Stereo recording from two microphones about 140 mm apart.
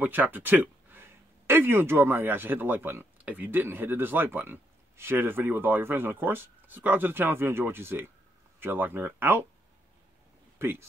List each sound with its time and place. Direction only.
0.0 s speech: 15° right (ahead or behind)
10.6 s speech: 15° right (ahead or behind)